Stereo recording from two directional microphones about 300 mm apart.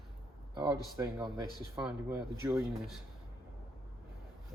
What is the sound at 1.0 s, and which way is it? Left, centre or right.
Speech, centre.